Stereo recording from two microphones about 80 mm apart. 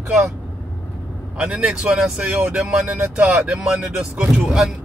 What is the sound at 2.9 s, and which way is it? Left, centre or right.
Speech, centre.